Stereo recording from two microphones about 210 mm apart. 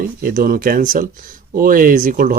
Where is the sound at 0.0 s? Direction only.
40° right (ahead or behind).